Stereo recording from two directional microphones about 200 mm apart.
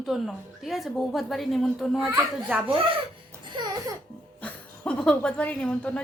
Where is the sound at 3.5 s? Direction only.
20° right (ahead or behind).